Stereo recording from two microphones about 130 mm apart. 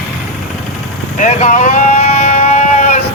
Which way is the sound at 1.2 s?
70° left (ahead or behind).